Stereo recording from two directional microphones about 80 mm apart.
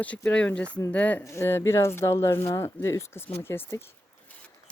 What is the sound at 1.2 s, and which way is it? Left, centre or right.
Speech, left.